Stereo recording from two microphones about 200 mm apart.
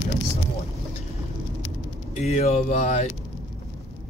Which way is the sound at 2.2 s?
35° left (ahead or behind).